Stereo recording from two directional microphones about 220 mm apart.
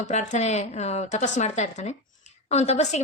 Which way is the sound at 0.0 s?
35° left (ahead or behind).